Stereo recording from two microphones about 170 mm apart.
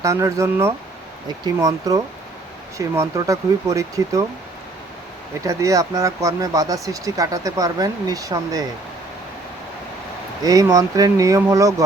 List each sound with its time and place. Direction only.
0.0 s speech: 20° right (ahead or behind)
5.5 s speech: 20° right (ahead or behind)
10.4 s speech: 20° right (ahead or behind)